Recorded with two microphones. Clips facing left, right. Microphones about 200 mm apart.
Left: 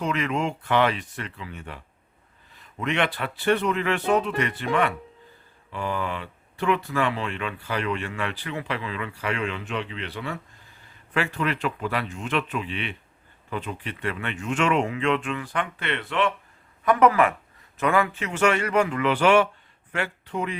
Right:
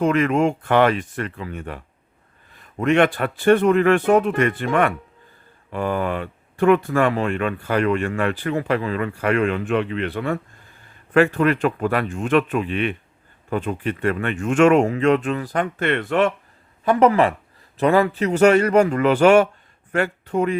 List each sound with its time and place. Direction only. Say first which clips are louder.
0.0 s speech: right 8 dB; 50° right (ahead or behind)
16.8 s a man's voice: right 3 dB; 30° right (ahead or behind); by 20.6 s 45° right (ahead or behind)